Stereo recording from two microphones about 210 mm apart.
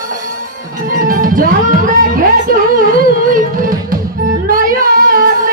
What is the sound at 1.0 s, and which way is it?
Music, 40° right (ahead or behind).